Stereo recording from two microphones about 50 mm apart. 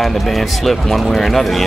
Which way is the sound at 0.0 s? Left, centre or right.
Centre.